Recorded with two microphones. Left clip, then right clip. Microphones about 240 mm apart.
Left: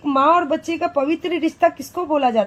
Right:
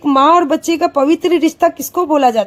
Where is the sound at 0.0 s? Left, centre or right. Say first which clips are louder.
Right 6 dB; right.